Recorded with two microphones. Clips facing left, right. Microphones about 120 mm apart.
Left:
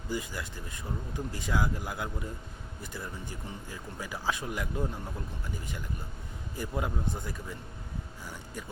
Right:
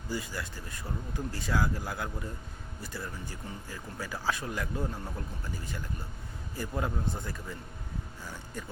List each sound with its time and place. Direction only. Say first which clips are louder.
0.1 s speech: left 1 dB; 20° left (ahead or behind)
6.6 s speech: even; 15° left (ahead or behind)